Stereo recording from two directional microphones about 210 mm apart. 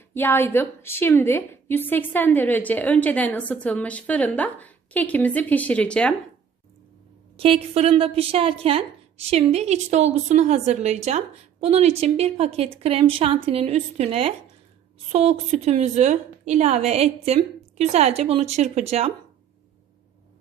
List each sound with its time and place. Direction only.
0.1 s a woman's voice: 10° left (ahead or behind)
7.3 s a woman's voice: 25° right (ahead or behind)